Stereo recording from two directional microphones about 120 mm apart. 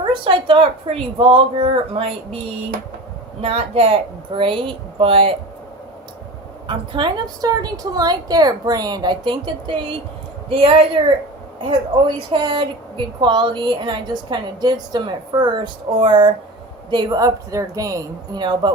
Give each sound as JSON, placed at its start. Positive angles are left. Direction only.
{"t": 0.0, "sound": "a woman's voice", "side_deg": -45}
{"t": 3.4, "sound": "a woman's voice", "side_deg": -50}
{"t": 6.7, "sound": "a woman's voice", "side_deg": -40}
{"t": 12.3, "sound": "a woman's voice", "side_deg": -40}